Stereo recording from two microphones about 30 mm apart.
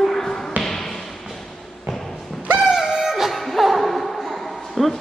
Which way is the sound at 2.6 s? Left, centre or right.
Centre.